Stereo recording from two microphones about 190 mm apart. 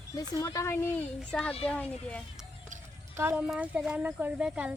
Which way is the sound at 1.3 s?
5° left (ahead or behind).